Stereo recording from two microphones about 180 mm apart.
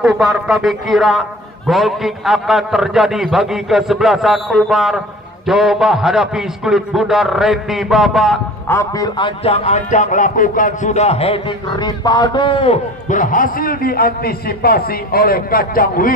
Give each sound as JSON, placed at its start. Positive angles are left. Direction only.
{"t": 0.0, "sound": "a man's voice", "side_deg": 0}
{"t": 8.6, "sound": "speech", "side_deg": 15}
{"t": 9.4, "sound": "speech", "side_deg": 35}
{"t": 11.7, "sound": "speech", "side_deg": 25}
{"t": 13.1, "sound": "a man's voice", "side_deg": 45}